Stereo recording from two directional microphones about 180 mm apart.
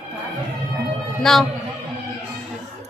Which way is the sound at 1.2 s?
Centre (ahead or behind).